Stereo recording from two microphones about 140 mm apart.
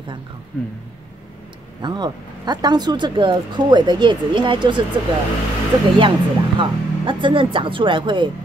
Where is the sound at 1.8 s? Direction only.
30° right (ahead or behind).